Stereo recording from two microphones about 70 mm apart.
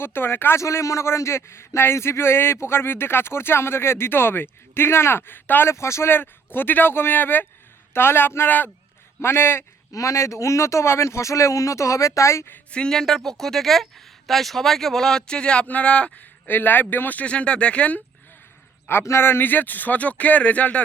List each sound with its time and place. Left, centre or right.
0.0 s a man's voice: left
0.6 s a man's voice: left
5.7 s a man's voice: left
9.9 s speech: left
12.7 s speech: centre
19.0 s speech: left